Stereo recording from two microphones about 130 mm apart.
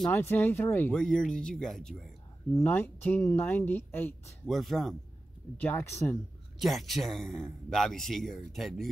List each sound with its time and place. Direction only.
0.1 s speech: 15° left (ahead or behind)
0.9 s speech: 5° left (ahead or behind)
2.6 s speech: 15° left (ahead or behind)
4.5 s speech: centre (ahead or behind)
5.6 s speech: 15° left (ahead or behind)
6.6 s speech: centre (ahead or behind)